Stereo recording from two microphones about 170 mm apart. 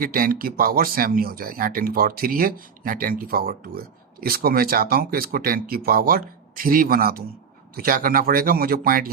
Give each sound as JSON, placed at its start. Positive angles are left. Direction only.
{"t": 0.0, "sound": "speech", "side_deg": -55}